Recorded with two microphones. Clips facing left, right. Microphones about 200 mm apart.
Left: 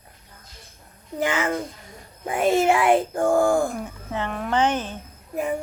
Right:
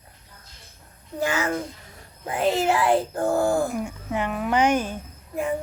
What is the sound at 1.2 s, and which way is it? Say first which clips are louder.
A child's voice: left 1 dB; 20° left (ahead or behind).